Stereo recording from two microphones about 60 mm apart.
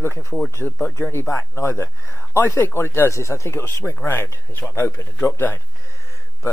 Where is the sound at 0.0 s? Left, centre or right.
Left.